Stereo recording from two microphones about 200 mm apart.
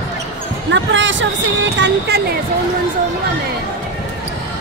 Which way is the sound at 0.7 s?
65° right (ahead or behind).